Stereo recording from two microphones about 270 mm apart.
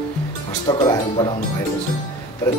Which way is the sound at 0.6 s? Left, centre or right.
Centre.